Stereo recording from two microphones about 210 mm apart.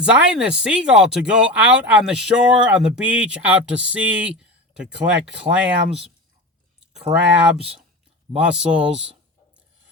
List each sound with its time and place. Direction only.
0.0 s speech: 5° right (ahead or behind)
7.1 s speech: 30° right (ahead or behind)
8.3 s speech: 5° right (ahead or behind)